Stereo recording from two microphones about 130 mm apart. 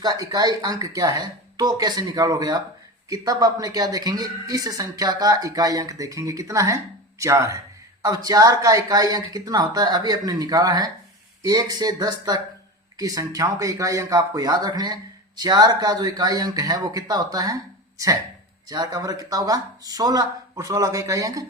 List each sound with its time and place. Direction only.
0.0 s a woman's voice: 30° right (ahead or behind)
18.7 s a woman's voice: 30° right (ahead or behind)